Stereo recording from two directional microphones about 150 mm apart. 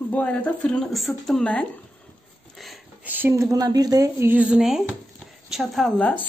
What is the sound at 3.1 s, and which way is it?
Speech, 15° right (ahead or behind).